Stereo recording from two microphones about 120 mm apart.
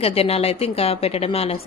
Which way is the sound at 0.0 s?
55° left (ahead or behind).